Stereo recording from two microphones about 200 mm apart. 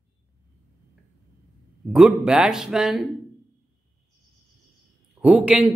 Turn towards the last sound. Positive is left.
turn(degrees=-5)  # may be behind; listen again after turning